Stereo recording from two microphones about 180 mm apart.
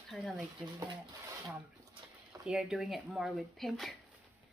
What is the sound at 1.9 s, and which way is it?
Speech, 5° right (ahead or behind).